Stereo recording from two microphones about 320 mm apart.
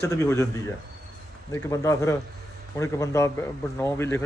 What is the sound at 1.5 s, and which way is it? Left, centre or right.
Speech, centre.